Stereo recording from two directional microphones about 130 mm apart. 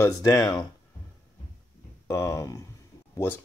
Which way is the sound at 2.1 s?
20° left (ahead or behind).